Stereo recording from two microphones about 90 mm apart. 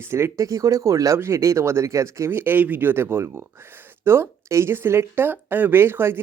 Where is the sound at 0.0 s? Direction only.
30° right (ahead or behind).